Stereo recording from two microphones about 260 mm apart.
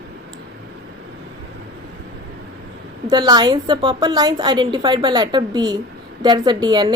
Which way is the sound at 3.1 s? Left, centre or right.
Centre.